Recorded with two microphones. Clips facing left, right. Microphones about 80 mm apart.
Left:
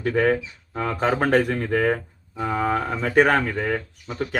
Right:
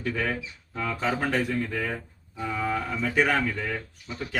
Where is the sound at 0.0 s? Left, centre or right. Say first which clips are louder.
Left 9 dB; left.